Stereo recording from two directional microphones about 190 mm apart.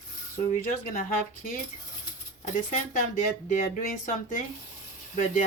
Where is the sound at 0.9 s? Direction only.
45° left (ahead or behind).